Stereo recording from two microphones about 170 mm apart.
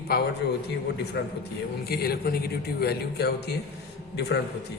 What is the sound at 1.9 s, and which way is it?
A man's voice, 65° left (ahead or behind).